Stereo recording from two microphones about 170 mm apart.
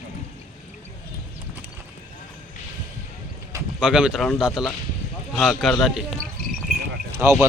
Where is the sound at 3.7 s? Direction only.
5° right (ahead or behind).